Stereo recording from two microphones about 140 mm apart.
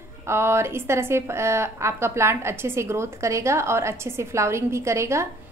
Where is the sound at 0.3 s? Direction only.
20° right (ahead or behind).